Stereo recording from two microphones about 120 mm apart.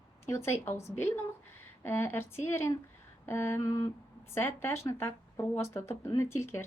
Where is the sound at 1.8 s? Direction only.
20° left (ahead or behind).